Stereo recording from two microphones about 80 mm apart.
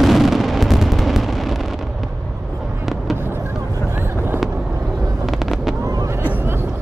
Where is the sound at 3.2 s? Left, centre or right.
Right.